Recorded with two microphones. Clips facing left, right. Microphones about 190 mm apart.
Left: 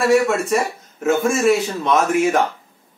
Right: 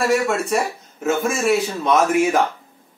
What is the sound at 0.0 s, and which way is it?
Speech, centre (ahead or behind).